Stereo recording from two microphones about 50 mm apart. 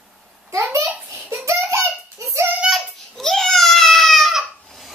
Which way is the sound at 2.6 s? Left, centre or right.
Centre.